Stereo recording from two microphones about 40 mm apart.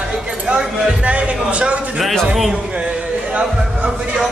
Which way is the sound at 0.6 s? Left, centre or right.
Right.